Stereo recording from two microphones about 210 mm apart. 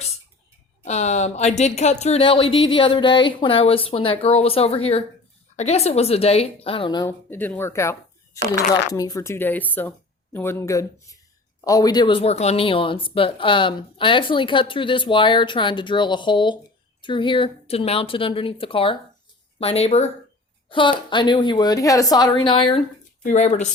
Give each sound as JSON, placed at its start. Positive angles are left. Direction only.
{"t": 0.9, "sound": "speech", "side_deg": 35}
{"t": 23.2, "sound": "speech", "side_deg": 35}